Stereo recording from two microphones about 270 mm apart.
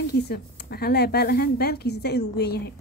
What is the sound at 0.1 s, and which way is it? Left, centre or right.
Speech, left.